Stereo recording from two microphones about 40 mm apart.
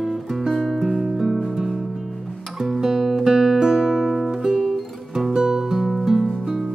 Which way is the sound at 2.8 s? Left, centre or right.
Centre.